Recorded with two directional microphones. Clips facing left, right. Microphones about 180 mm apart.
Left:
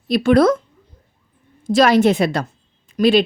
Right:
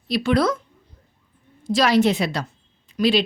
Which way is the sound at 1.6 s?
50° left (ahead or behind).